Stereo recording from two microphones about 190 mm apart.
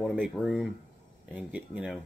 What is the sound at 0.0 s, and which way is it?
Speech, 5° left (ahead or behind).